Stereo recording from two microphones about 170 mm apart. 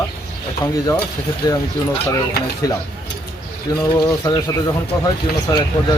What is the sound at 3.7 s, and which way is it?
Speech, 20° left (ahead or behind).